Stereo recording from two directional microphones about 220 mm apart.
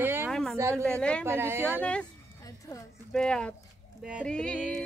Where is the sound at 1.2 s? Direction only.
10° right (ahead or behind).